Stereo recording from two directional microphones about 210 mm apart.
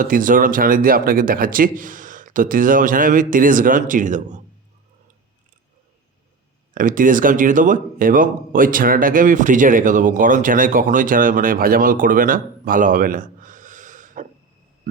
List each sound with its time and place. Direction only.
0.0 s speech: 40° right (ahead or behind)
6.7 s speech: 40° right (ahead or behind)